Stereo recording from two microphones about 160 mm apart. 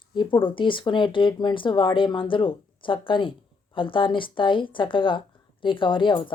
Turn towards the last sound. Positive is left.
turn(degrees=30)  # may be behind; listen again after turning